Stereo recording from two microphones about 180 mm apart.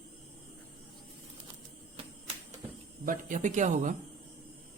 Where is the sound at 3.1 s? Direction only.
45° right (ahead or behind).